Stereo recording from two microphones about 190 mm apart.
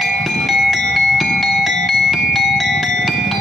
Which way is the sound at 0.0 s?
Centre (ahead or behind).